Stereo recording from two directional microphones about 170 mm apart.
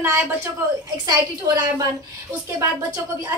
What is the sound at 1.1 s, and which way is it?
Speech, 20° right (ahead or behind).